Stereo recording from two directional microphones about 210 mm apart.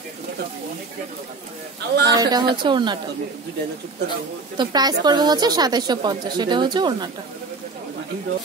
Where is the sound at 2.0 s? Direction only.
20° right (ahead or behind).